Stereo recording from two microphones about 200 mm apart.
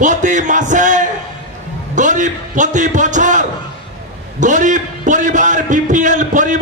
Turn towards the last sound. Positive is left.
turn(degrees=-40)  # may be behind; listen again after turning